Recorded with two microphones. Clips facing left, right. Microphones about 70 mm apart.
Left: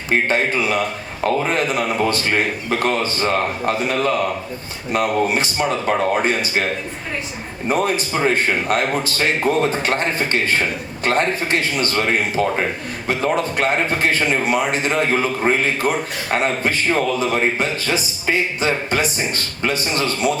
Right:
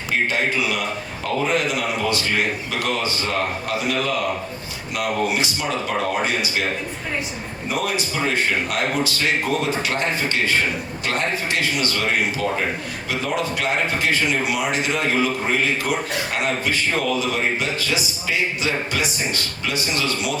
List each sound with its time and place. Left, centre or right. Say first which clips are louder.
0.1 s a man's voice: left 3 dB; left
7.7 s a man's voice: left 5 dB; left